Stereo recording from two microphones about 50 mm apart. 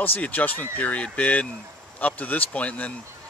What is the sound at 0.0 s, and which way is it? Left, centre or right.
Speech, left.